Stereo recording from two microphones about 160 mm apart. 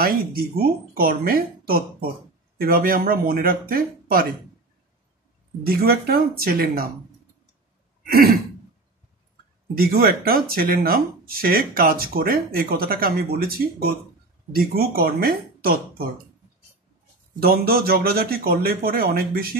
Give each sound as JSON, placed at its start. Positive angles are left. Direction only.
{"t": 0.0, "sound": "speech", "side_deg": -65}
{"t": 5.7, "sound": "speech", "side_deg": -70}
{"t": 9.8, "sound": "speech", "side_deg": -70}
{"t": 17.4, "sound": "speech", "side_deg": -70}